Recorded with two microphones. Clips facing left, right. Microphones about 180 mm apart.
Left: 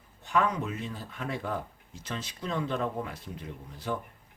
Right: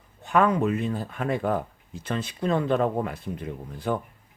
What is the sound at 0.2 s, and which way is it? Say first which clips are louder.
Speech: right 7 dB; 60° right (ahead or behind).